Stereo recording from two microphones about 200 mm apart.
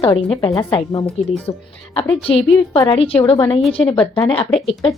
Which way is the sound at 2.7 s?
25° left (ahead or behind).